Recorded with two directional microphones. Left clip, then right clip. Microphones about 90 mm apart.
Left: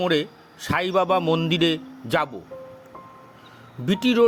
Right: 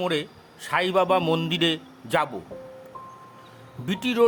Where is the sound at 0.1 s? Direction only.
55° left (ahead or behind).